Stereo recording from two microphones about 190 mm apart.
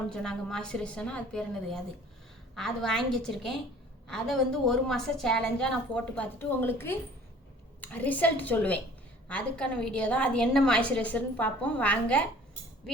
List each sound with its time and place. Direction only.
0.1 s a woman's voice: 5° left (ahead or behind)